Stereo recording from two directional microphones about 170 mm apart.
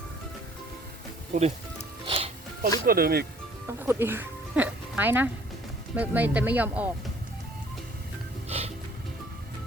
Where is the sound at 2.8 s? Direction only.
65° right (ahead or behind).